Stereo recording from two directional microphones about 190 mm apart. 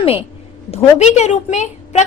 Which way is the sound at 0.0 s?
30° left (ahead or behind).